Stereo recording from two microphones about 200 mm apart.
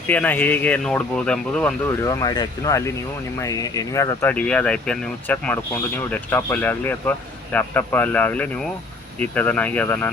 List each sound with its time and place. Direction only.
0.1 s speech: 10° left (ahead or behind)
1.9 s speech: 15° left (ahead or behind)